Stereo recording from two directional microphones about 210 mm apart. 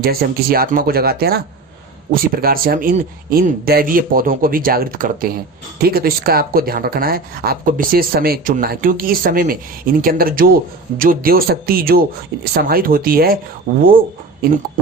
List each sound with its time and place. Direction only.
0.0 s speech: 45° right (ahead or behind)